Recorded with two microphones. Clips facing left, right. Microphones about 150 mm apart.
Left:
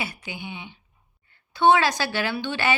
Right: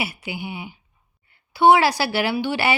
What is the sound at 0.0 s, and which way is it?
Speech, 10° right (ahead or behind).